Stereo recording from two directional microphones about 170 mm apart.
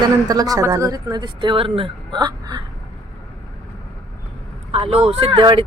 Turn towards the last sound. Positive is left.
turn(degrees=-30)  # may be behind; listen again after turning